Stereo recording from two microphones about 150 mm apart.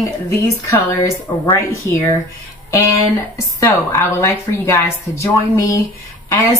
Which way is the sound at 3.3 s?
20° left (ahead or behind).